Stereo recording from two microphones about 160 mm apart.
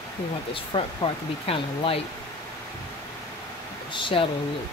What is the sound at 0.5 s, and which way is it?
Speech, 35° left (ahead or behind).